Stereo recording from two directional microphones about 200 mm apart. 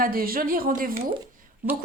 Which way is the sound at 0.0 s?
45° right (ahead or behind).